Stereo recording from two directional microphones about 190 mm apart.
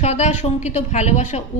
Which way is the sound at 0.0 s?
35° left (ahead or behind).